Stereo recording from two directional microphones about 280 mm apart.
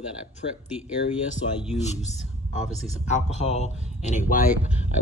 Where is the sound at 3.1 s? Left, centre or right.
Left.